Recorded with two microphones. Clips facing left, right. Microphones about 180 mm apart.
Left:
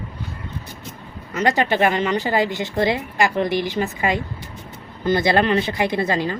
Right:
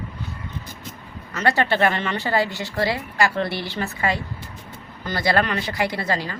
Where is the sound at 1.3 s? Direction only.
15° left (ahead or behind).